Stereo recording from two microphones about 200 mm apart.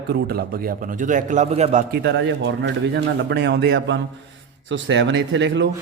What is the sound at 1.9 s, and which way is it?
A man's voice, 55° right (ahead or behind).